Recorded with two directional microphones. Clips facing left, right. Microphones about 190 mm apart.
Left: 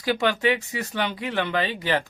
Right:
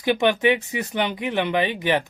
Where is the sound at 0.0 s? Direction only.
20° right (ahead or behind).